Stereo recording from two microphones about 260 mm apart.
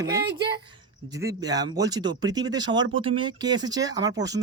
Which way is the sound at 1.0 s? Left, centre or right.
Centre.